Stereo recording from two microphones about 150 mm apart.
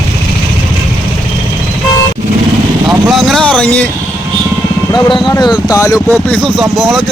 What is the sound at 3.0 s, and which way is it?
Speech, centre (ahead or behind).